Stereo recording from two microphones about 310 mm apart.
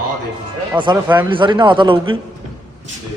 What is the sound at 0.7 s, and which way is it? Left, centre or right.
A man's voice, centre.